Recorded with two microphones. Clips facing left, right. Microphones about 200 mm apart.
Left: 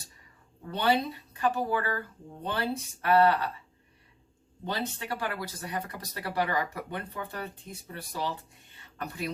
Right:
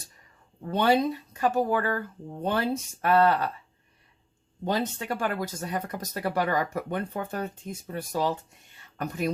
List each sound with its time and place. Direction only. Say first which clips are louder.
1.4 s speech: right 3 dB; 45° right (ahead or behind)
4.6 s speech: right 6 dB; 45° right (ahead or behind)